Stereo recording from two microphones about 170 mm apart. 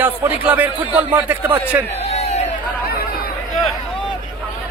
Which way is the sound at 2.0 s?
40° left (ahead or behind).